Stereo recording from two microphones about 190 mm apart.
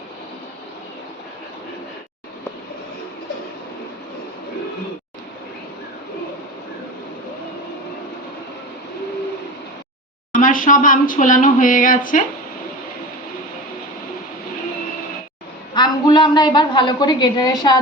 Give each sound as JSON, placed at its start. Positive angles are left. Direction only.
{"t": 10.3, "sound": "speech", "side_deg": 45}
{"t": 15.7, "sound": "a woman's voice", "side_deg": 20}